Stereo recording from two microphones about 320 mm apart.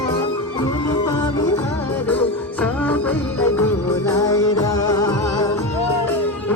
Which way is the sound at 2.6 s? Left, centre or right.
Centre.